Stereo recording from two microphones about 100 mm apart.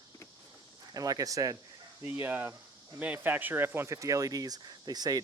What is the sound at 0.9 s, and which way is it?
Speech, 40° right (ahead or behind).